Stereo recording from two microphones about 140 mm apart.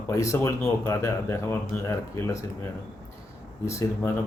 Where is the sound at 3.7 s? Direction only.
20° left (ahead or behind).